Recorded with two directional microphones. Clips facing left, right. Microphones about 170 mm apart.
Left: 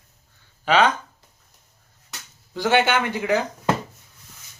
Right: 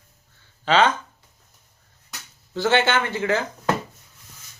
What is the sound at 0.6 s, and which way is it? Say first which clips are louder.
Speech: even; 10° left (ahead or behind).